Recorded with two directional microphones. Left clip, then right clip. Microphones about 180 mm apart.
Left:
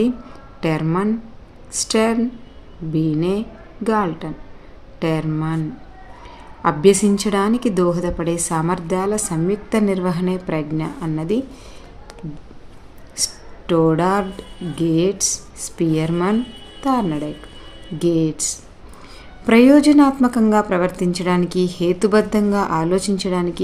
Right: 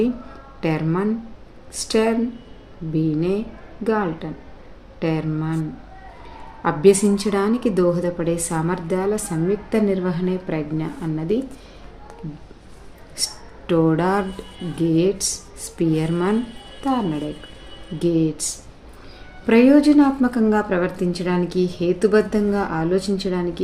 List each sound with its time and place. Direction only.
0.6 s a woman's voice: 30° left (ahead or behind)
6.6 s a woman's voice: 30° left (ahead or behind)
13.1 s a woman's voice: 25° left (ahead or behind)